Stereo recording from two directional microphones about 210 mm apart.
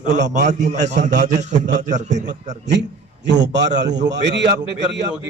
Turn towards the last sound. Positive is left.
turn(degrees=-55)  # may be behind; listen again after turning